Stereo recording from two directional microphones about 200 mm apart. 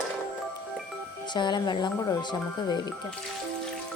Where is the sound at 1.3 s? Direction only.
20° left (ahead or behind).